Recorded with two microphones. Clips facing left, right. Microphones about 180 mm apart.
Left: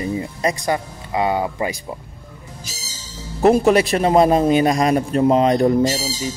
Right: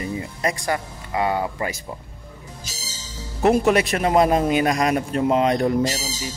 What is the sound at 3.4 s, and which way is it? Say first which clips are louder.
Speech: left 4 dB; 35° left (ahead or behind).